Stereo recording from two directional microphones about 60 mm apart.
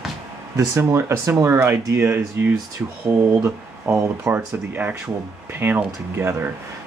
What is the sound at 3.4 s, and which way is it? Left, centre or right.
Speech, right.